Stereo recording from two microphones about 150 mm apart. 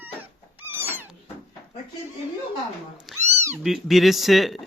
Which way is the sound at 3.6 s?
Centre (ahead or behind).